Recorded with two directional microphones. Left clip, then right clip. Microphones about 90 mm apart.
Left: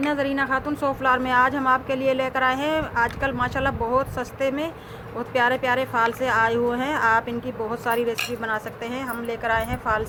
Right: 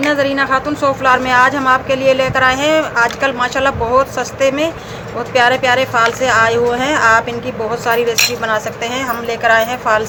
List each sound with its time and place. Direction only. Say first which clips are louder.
0.0 s speech: right 9 dB; 50° left (ahead or behind); by 10.0 s 35° left (ahead or behind)